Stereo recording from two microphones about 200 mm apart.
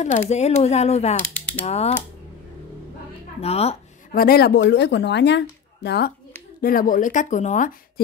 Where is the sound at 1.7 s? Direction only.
30° left (ahead or behind).